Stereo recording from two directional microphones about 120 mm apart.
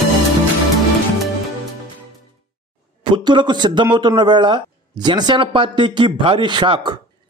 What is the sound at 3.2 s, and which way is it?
A man's voice, 40° right (ahead or behind).